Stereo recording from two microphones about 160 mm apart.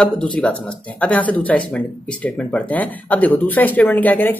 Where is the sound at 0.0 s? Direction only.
5° left (ahead or behind).